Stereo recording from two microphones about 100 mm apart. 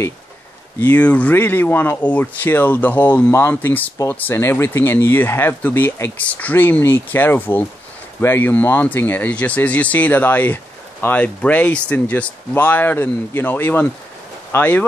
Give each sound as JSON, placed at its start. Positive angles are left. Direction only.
{"t": 0.7, "sound": "speech", "side_deg": 15}